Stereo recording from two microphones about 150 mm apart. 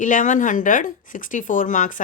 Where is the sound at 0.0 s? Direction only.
60° left (ahead or behind).